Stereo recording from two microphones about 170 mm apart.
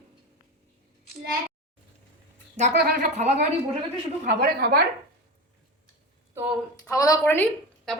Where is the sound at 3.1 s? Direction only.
45° right (ahead or behind).